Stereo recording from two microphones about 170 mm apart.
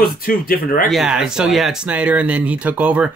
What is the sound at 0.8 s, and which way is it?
Speech, centre (ahead or behind).